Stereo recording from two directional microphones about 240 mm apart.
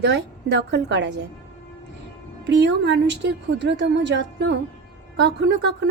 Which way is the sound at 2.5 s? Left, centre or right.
Right.